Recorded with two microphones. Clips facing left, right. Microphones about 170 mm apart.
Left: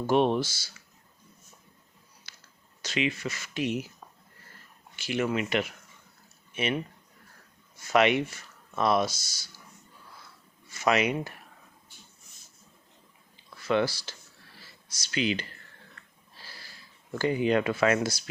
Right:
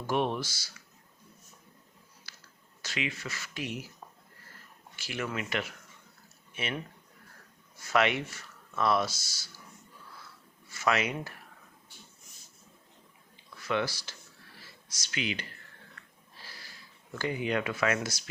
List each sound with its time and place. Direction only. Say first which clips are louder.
0.1 s speech: left 6 dB; 25° left (ahead or behind)
2.3 s a sound: right 1 dB; 20° left (ahead or behind)
2.8 s speech: left 7 dB; 20° left (ahead or behind)
4.9 s speech: left 7 dB; 20° left (ahead or behind)
7.8 s speech: left 4 dB; 20° left (ahead or behind)
10.7 s speech: left 4 dB; 20° left (ahead or behind)
13.7 s speech: left 5 dB; 30° left (ahead or behind)
17.2 s speech: left 6 dB; 35° left (ahead or behind)